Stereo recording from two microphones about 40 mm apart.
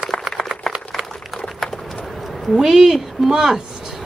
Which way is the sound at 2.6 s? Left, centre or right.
Centre.